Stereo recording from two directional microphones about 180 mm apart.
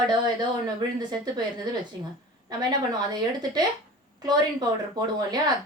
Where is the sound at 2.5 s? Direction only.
25° right (ahead or behind).